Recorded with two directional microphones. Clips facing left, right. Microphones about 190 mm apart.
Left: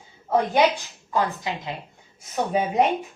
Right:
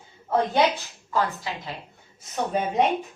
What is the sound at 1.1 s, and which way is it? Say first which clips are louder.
A woman's voice: left 2 dB; 20° left (ahead or behind).